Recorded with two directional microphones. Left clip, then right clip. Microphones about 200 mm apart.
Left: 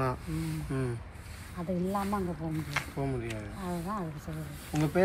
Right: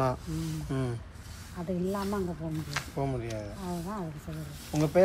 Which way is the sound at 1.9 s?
Centre (ahead or behind).